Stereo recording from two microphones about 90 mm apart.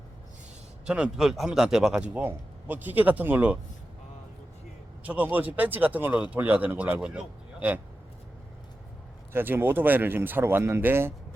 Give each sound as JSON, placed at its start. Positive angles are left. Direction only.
{"t": 0.9, "sound": "speech", "side_deg": -10}
{"t": 2.1, "sound": "speech", "side_deg": -20}
{"t": 5.0, "sound": "speech", "side_deg": -20}
{"t": 9.3, "sound": "speech", "side_deg": -25}